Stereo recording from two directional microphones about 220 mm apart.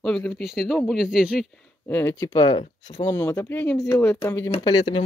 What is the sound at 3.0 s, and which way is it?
Speech, 10° left (ahead or behind).